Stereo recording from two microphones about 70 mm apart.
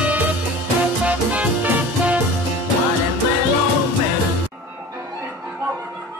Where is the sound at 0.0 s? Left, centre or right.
Right.